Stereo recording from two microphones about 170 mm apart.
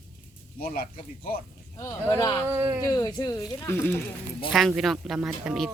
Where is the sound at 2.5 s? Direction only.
15° right (ahead or behind).